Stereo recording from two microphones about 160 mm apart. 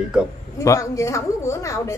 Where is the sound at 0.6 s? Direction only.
20° left (ahead or behind).